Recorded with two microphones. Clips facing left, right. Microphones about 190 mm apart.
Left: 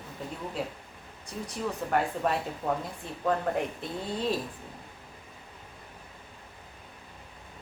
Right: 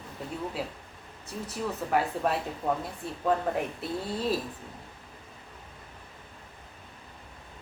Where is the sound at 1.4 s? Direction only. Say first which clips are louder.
Even; 5° right (ahead or behind).